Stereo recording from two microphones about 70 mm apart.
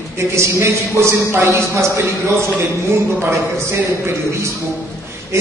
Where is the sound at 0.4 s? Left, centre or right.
Right.